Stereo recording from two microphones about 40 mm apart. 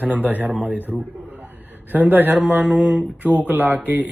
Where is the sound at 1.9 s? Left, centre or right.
Right.